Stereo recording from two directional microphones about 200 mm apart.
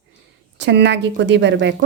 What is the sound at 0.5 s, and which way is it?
Speech, 60° right (ahead or behind).